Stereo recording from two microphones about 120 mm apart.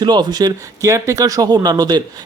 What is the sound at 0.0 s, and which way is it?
Speech, 35° right (ahead or behind).